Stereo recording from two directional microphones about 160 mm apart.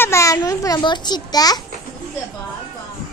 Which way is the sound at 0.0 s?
20° left (ahead or behind).